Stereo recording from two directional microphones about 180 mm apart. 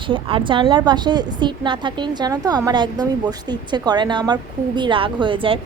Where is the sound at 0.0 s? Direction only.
30° right (ahead or behind).